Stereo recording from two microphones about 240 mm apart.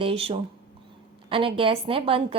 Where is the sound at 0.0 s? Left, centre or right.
Right.